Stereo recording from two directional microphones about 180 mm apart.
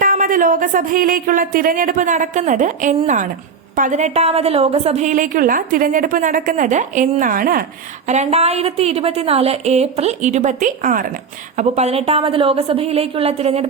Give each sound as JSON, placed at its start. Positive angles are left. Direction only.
{"t": 0.0, "sound": "a woman's voice", "side_deg": -50}